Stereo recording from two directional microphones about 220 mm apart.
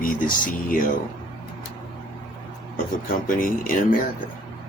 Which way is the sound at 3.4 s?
40° left (ahead or behind).